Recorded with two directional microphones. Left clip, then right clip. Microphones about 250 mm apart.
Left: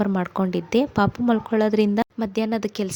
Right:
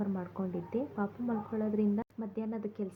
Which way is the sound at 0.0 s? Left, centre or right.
Left.